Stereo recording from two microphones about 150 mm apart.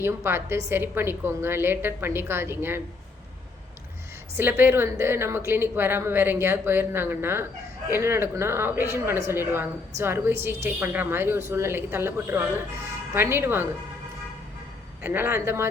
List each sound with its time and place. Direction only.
0.0 s a woman's voice: 15° right (ahead or behind)
4.4 s a woman's voice: 15° right (ahead or behind)
15.0 s a woman's voice: 15° right (ahead or behind)